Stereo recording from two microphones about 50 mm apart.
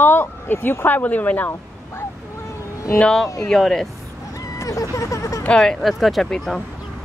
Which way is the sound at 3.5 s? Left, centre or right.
Centre.